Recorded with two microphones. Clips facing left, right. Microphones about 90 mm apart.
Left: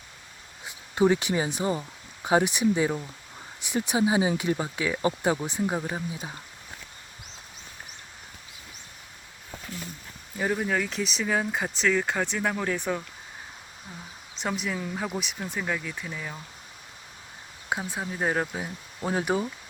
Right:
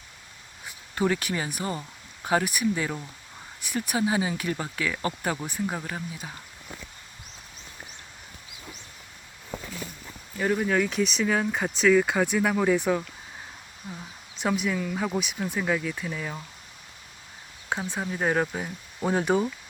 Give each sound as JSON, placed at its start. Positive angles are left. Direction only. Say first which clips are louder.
{"t": 0.6, "sound": "speech", "louder": "left 4 dB", "side_deg": 20}
{"t": 10.3, "sound": "speech", "louder": "right 2 dB", "side_deg": 5}
{"t": 13.9, "sound": "a sound", "louder": "right 5 dB", "side_deg": -5}
{"t": 14.4, "sound": "speech", "louder": "right 4 dB", "side_deg": 0}
{"t": 17.7, "sound": "speech", "louder": "right 1 dB", "side_deg": 10}